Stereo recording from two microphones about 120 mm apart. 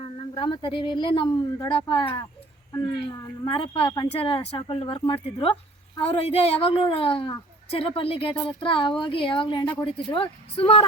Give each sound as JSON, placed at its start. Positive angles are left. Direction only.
{"t": 0.0, "sound": "a woman's voice", "side_deg": 45}